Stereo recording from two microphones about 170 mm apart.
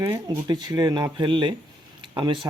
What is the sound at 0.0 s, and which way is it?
Speech, 20° right (ahead or behind).